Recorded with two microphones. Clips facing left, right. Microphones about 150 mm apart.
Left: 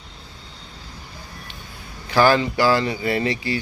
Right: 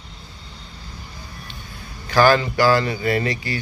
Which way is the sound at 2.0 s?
25° left (ahead or behind).